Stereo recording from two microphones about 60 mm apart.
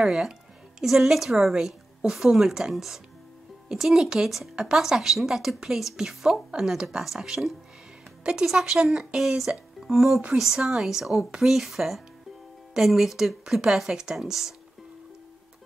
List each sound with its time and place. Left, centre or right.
0.0 s a woman's voice: centre
8.2 s a woman's voice: centre